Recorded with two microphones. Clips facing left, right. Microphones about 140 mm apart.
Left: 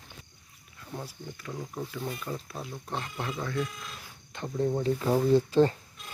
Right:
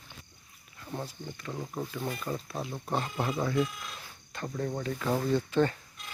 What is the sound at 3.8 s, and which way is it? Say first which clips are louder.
Speech: even; centre (ahead or behind).